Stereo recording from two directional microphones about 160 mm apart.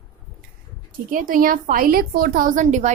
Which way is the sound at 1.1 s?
60° right (ahead or behind).